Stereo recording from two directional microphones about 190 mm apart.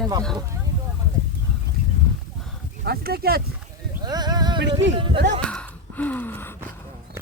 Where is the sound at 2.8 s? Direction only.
55° right (ahead or behind).